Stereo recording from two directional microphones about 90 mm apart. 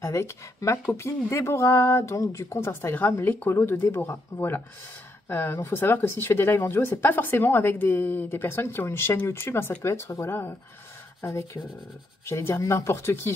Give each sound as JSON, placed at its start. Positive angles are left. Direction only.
{"t": 0.0, "sound": "speech", "side_deg": 30}